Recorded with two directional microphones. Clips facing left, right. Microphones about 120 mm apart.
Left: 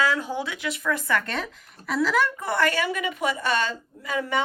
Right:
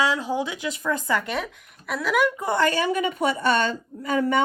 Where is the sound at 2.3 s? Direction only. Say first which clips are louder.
Right 2 dB; 25° right (ahead or behind).